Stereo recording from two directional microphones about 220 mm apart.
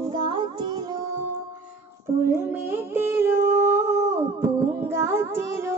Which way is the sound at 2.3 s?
10° right (ahead or behind).